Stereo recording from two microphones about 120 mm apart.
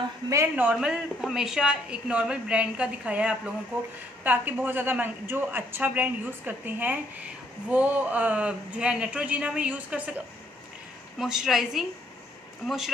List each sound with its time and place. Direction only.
0.3 s speech: 20° right (ahead or behind)
0.7 s a woman's voice: 5° right (ahead or behind)